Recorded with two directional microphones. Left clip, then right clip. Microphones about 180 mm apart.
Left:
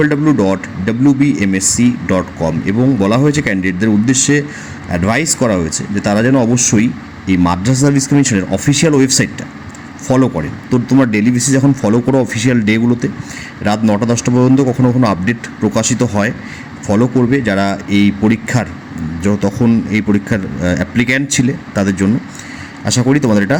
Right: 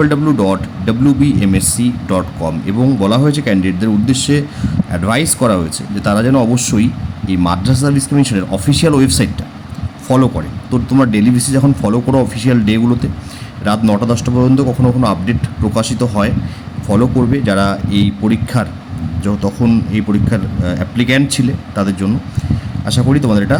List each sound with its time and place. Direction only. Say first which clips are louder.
0.0 s speech: left 1 dB; 5° left (ahead or behind)